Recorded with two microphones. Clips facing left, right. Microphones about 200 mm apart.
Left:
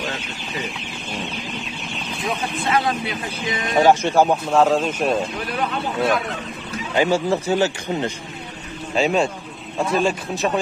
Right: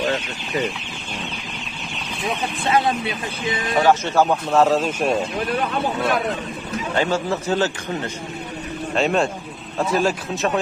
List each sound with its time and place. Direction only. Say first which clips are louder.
2.7 s speech: right 2 dB; 25° right (ahead or behind)
3.8 s a man's voice: left 2 dB; 15° left (ahead or behind)
4.5 s speech: even; centre (ahead or behind)
7.0 s a man's voice: left 4 dB; 10° left (ahead or behind)
8.9 s a man's voice: left 1 dB; centre (ahead or behind)